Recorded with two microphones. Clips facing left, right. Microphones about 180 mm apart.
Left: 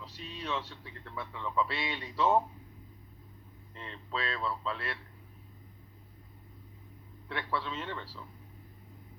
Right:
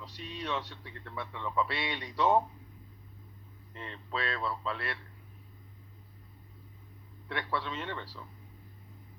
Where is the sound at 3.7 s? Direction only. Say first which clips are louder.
Right 1 dB; 5° right (ahead or behind).